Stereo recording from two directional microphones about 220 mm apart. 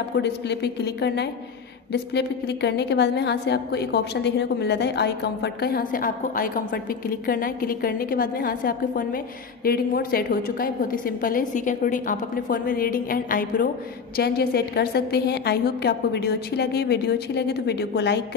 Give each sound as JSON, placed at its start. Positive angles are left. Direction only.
{"t": 0.1, "sound": "a woman's voice", "side_deg": 50}